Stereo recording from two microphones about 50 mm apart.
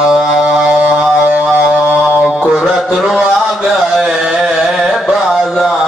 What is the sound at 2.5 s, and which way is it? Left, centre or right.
Music, centre.